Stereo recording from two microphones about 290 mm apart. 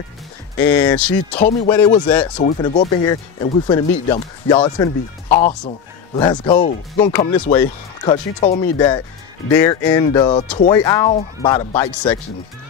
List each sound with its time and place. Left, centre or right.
0.6 s speech: centre
1.4 s speech: left
6.5 s speech: left
7.1 s speech: centre